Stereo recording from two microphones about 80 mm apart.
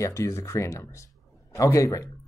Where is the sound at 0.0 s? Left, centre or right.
Left.